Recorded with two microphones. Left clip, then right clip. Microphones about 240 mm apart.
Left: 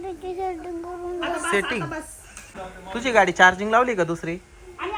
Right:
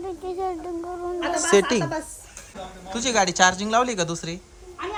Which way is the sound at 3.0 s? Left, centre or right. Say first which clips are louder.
Left 3 dB; centre.